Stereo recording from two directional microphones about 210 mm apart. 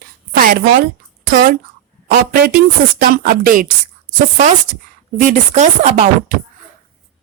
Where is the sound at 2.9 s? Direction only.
40° right (ahead or behind).